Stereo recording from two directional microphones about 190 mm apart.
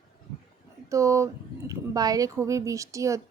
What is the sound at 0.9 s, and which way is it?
Speech, 15° right (ahead or behind).